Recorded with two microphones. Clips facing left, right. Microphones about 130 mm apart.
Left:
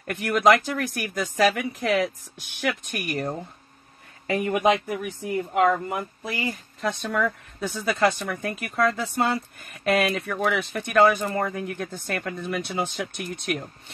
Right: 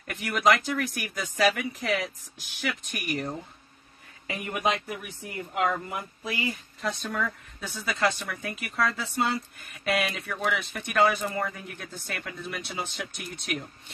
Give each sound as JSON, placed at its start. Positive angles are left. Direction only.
{"t": 0.0, "sound": "speech", "side_deg": 50}